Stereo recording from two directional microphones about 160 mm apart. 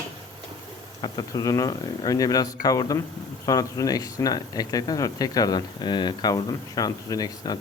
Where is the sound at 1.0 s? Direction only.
25° left (ahead or behind).